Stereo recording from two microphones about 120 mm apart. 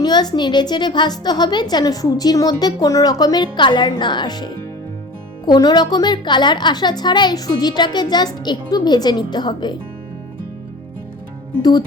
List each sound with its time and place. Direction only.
0.0 s a woman's voice: 35° left (ahead or behind)